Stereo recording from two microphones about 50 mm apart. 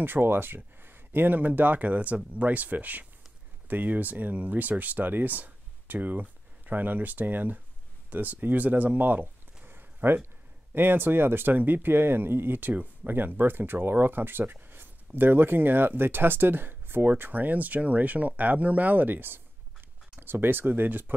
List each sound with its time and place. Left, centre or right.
0.0 s speech: right